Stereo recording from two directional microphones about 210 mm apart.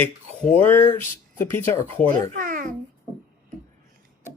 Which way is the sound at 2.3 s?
40° right (ahead or behind).